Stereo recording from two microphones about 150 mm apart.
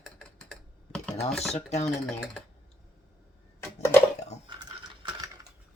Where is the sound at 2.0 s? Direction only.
5° left (ahead or behind).